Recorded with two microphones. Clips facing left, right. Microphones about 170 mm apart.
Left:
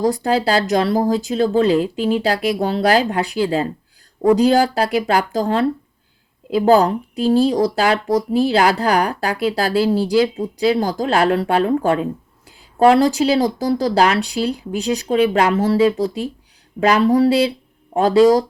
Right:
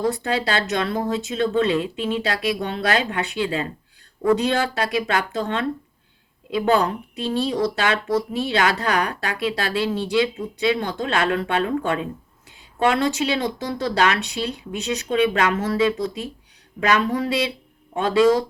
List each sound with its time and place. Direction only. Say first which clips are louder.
0.0 s speech: left 5 dB; 35° left (ahead or behind)